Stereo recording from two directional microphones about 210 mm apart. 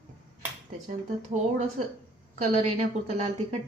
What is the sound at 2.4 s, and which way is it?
Speech, 30° right (ahead or behind).